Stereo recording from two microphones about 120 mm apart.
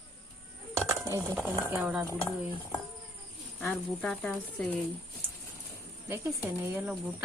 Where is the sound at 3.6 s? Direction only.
10° left (ahead or behind).